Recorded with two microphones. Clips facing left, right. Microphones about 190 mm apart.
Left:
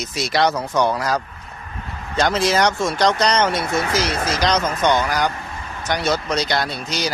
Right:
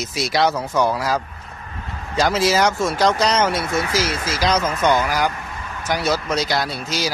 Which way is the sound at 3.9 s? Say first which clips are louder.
Left 1 dB; 55° left (ahead or behind).